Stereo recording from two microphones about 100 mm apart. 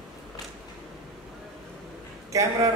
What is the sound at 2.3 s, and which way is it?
Speech, 35° right (ahead or behind).